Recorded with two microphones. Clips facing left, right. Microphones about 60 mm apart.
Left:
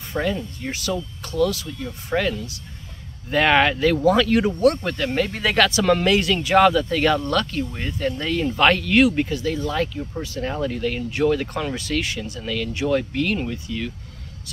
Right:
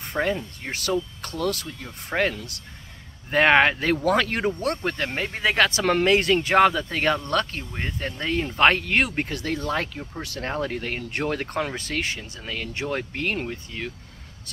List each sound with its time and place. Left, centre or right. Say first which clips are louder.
0.2 s speech: even; right
5.2 s speech: left 2 dB; centre
5.7 s speech: left 2 dB; right
10.2 s speech: left 3 dB; right
10.5 s speech: left 2 dB; right